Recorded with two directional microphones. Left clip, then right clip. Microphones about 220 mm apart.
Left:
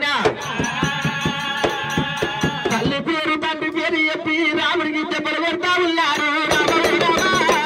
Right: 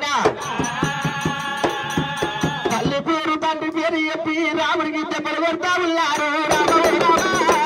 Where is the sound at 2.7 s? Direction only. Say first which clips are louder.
Even; 40° right (ahead or behind).